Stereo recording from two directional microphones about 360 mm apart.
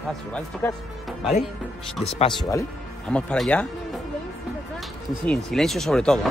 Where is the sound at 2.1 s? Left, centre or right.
Centre.